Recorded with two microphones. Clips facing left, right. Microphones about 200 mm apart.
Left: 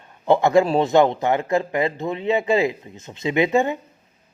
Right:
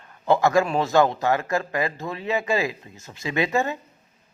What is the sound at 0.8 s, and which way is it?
Speech, 20° left (ahead or behind).